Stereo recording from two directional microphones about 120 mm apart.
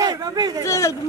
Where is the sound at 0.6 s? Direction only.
25° left (ahead or behind).